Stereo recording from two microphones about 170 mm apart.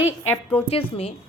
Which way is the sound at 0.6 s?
35° left (ahead or behind).